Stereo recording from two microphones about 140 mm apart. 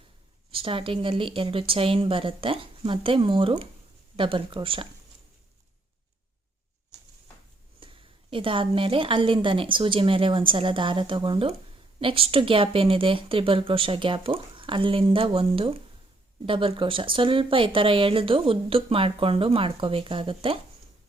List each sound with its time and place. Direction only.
0.5 s speech: 40° right (ahead or behind)
7.8 s speech: 40° right (ahead or behind)